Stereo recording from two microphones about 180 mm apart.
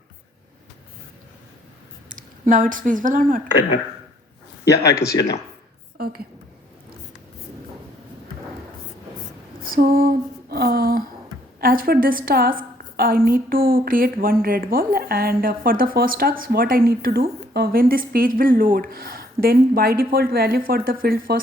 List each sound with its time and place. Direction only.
2.0 s speech: 45° right (ahead or behind)
4.8 s speech: 20° left (ahead or behind)
6.0 s a woman's voice: 60° right (ahead or behind)
9.6 s a sound: 55° right (ahead or behind)
11.6 s speech: 55° right (ahead or behind)